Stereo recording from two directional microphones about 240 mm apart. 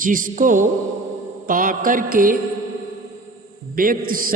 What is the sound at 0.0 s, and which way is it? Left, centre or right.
A man's voice, right.